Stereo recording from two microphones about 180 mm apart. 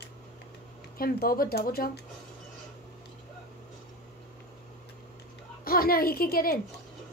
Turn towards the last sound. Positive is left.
turn(degrees=55)  # may be behind; listen again after turning